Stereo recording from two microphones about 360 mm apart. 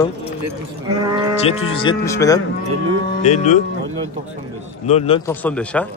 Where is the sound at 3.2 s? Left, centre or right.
Centre.